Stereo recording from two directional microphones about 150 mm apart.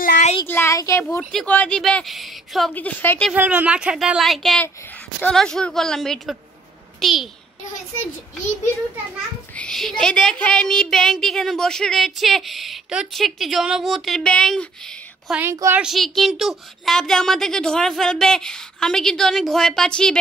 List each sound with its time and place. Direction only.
0.5 s speech: 15° left (ahead or behind)
1.3 s a woman's voice: 10° left (ahead or behind)
2.7 s speech: 10° left (ahead or behind)
3.3 s a woman's voice: 10° right (ahead or behind)
9.6 s a woman's voice: 5° left (ahead or behind)
15.5 s a woman's voice: 20° right (ahead or behind)
15.8 s a woman's voice: centre (ahead or behind)